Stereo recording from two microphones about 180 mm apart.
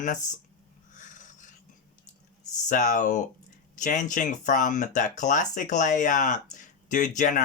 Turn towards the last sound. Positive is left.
turn(degrees=45)  # may be behind; listen again after turning